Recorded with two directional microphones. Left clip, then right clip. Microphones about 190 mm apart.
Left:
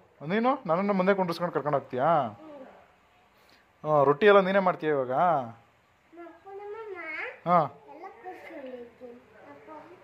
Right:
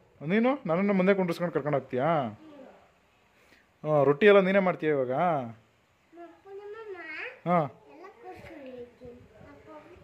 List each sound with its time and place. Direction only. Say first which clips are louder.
0.2 s a man's voice: even; 40° right (ahead or behind)
3.8 s a man's voice: left 1 dB; 45° right (ahead or behind)
7.4 s a man's voice: left 3 dB; 35° right (ahead or behind)